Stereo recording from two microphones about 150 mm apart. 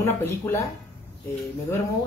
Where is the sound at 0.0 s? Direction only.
15° left (ahead or behind).